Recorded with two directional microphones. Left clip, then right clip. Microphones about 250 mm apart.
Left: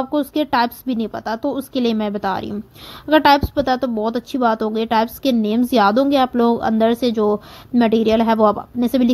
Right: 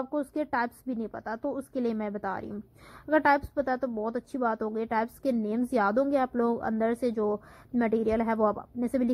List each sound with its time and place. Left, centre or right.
0.0 s a woman's voice: left